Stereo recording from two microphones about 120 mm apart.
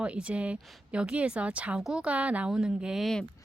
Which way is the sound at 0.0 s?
10° right (ahead or behind).